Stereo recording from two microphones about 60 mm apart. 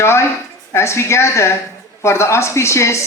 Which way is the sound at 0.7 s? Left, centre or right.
Left.